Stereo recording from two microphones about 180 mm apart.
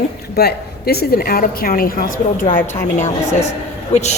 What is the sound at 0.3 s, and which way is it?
A woman's voice, 60° left (ahead or behind).